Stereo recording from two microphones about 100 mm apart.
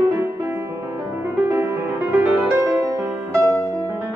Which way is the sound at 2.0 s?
20° right (ahead or behind).